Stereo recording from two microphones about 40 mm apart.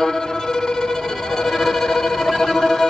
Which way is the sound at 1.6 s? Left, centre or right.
Centre.